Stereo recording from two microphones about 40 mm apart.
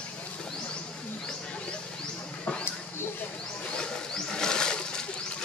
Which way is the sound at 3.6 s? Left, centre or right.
Left.